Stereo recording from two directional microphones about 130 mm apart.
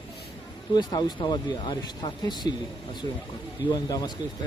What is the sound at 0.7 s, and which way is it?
Speech, 30° left (ahead or behind).